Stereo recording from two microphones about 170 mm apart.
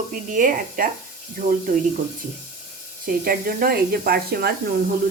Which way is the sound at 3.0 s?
60° right (ahead or behind).